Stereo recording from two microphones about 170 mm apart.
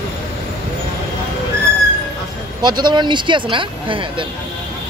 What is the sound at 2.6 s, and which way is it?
Speech, 25° right (ahead or behind).